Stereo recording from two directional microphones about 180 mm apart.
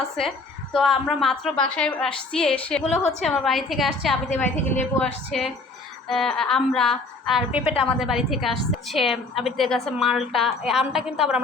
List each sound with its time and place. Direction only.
0.3 s a woman's voice: centre (ahead or behind)
4.5 s a woman's voice: 40° left (ahead or behind)
4.9 s a woman's voice: 5° left (ahead or behind)
7.6 s a woman's voice: 30° left (ahead or behind)
7.9 s a woman's voice: centre (ahead or behind)